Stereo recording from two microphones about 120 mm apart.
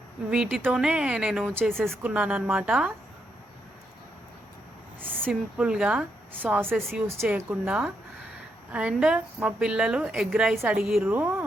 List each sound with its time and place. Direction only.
0.3 s a woman's voice: 5° right (ahead or behind)
2.0 s a woman's voice: 10° right (ahead or behind)
5.1 s a sound: 5° left (ahead or behind)
5.5 s a woman's voice: 5° right (ahead or behind)